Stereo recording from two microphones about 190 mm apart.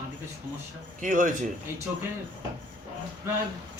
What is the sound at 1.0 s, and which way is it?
Speech, 45° right (ahead or behind).